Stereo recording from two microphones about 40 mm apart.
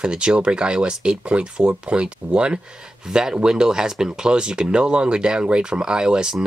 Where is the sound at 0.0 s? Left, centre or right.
Right.